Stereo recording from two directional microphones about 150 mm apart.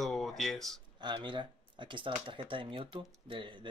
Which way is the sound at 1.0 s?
30° right (ahead or behind).